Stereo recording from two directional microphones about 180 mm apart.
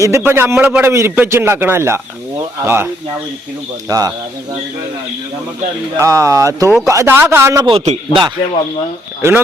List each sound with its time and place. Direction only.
0.0 s a man's voice: 15° right (ahead or behind)
6.0 s a man's voice: 15° right (ahead or behind)
7.7 s a man's voice: 30° right (ahead or behind)